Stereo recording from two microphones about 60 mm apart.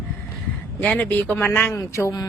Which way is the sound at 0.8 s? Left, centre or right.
Centre.